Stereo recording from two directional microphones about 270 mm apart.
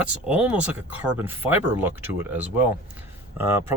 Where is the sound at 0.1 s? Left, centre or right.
Centre.